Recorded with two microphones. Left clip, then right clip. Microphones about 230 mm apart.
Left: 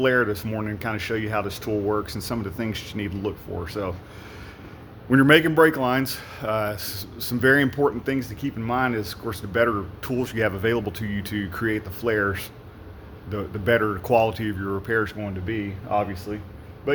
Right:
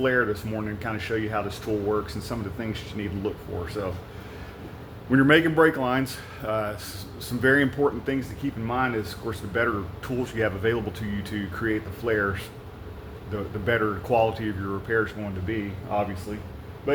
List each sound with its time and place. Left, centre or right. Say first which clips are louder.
0.0 s speech: left 2 dB; left
5.1 s speech: left 3 dB; left